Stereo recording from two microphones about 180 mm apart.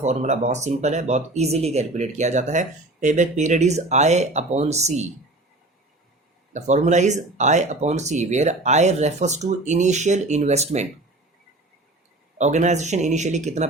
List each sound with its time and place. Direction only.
0.0 s speech: 40° right (ahead or behind)
6.5 s speech: 40° right (ahead or behind)
12.4 s speech: 40° right (ahead or behind)